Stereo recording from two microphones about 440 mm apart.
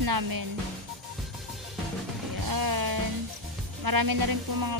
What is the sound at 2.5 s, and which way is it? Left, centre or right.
Music, right.